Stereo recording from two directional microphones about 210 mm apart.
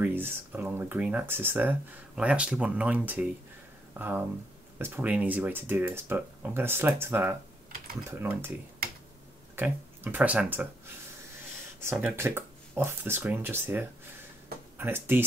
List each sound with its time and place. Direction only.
0.0 s speech: 10° right (ahead or behind)
4.7 s speech: 10° right (ahead or behind)
9.6 s speech: 10° right (ahead or behind)
11.8 s speech: 10° right (ahead or behind)